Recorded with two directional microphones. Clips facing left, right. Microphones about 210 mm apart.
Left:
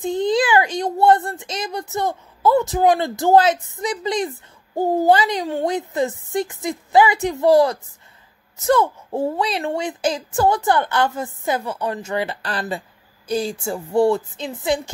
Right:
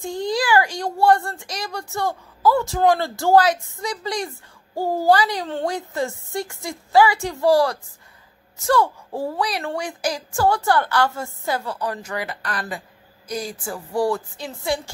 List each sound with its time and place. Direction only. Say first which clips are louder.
0.0 s a child's voice: left 5 dB; 20° left (ahead or behind)